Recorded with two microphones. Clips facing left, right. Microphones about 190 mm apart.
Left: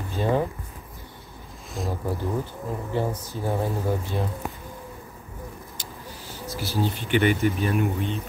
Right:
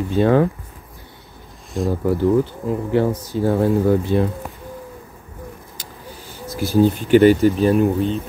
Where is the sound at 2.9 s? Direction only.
85° right.